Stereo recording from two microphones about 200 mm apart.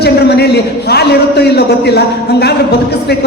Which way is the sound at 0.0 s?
55° left (ahead or behind).